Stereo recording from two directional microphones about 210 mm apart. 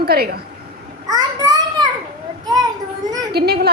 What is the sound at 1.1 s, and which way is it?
Speech, 15° right (ahead or behind).